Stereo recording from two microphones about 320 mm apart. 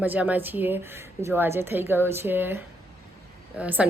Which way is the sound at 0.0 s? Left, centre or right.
Centre.